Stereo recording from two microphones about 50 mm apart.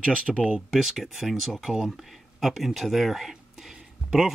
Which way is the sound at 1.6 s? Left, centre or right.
Centre.